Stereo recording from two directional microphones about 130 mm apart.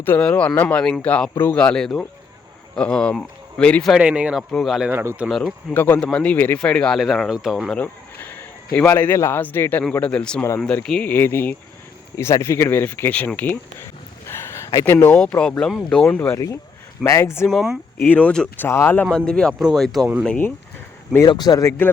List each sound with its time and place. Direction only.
0.0 s speech: 10° left (ahead or behind)
3.9 s speech: 10° right (ahead or behind)
4.9 s speech: 15° right (ahead or behind)
5.3 s speech: centre (ahead or behind)
5.7 s speech: 15° left (ahead or behind); by 7.8 s centre (ahead or behind)
7.8 s a man's voice: 15° left (ahead or behind)
14.3 s a sound: 20° left (ahead or behind)
14.9 s speech: 10° left (ahead or behind)
16.2 s speech: 25° left (ahead or behind)
17.5 s speech: centre (ahead or behind)
18.0 s speech: 10° left (ahead or behind)
19.1 s speech: 5° left (ahead or behind)
21.2 s speech: 30° left (ahead or behind)